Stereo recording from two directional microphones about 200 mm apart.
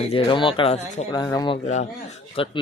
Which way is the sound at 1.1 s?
20° left (ahead or behind).